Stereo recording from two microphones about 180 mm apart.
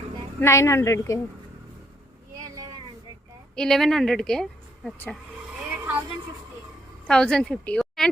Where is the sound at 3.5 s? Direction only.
5° left (ahead or behind).